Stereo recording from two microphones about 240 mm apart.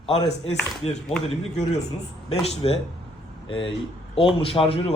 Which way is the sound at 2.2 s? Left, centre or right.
Left.